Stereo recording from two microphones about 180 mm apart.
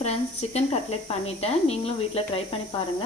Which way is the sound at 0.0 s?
35° left (ahead or behind).